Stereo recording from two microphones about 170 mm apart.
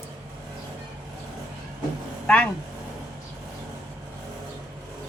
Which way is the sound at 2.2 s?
5° left (ahead or behind).